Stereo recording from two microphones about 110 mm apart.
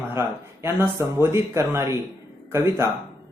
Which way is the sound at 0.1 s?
20° right (ahead or behind).